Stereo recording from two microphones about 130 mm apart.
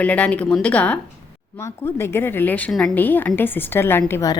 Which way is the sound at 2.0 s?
20° left (ahead or behind).